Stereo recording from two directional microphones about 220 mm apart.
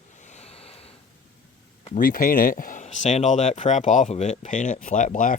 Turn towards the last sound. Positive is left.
turn(degrees=35)  # may be behind; listen again after turning